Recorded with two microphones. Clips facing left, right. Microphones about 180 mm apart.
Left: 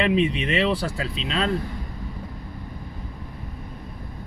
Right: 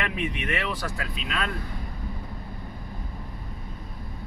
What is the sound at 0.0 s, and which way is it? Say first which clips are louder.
Speech: left 9 dB; 20° left (ahead or behind).